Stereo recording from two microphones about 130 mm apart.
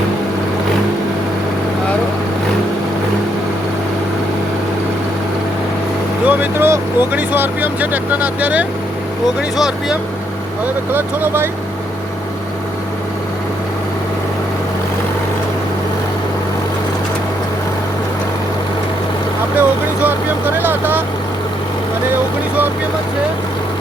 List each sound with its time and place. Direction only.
6.2 s speech: 15° right (ahead or behind)
10.9 s speech: 15° right (ahead or behind)
19.5 s speech: 15° right (ahead or behind)